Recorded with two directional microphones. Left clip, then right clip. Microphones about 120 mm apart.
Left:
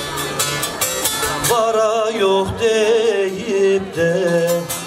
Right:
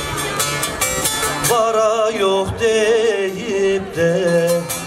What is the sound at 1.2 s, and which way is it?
Music, centre (ahead or behind).